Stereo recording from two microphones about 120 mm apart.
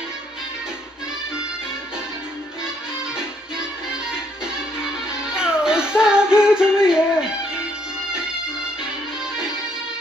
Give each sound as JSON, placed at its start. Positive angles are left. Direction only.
{"t": 5.3, "sound": "music", "side_deg": -5}